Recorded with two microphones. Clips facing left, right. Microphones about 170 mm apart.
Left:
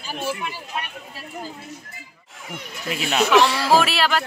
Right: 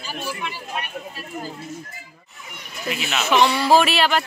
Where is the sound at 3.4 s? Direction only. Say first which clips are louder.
Right 3 dB; 90° left.